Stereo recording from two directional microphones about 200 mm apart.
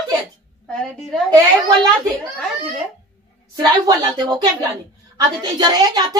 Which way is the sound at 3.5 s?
20° right (ahead or behind).